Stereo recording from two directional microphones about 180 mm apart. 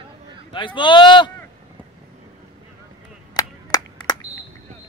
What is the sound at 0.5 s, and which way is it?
Speech, 25° left (ahead or behind).